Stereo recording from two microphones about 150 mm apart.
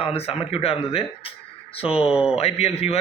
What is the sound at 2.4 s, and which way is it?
Speech, 45° left (ahead or behind).